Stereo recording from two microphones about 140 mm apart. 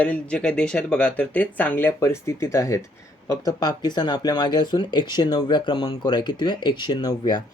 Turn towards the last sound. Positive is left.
turn(degrees=30)  # may be behind; listen again after turning